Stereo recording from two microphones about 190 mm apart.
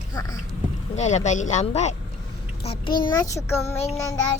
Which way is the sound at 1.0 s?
40° left (ahead or behind).